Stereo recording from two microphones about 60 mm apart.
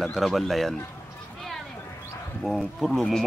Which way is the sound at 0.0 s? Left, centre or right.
Centre.